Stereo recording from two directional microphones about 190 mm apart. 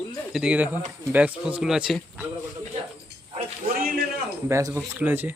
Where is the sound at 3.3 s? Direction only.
50° right (ahead or behind).